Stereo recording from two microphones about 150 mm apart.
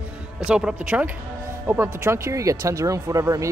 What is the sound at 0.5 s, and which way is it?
Speech, 5° right (ahead or behind).